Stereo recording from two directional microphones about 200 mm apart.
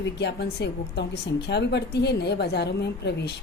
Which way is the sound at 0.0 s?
60° left (ahead or behind).